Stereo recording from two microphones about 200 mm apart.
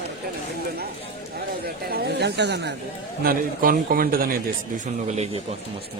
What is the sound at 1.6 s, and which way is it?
Speech, 50° right (ahead or behind).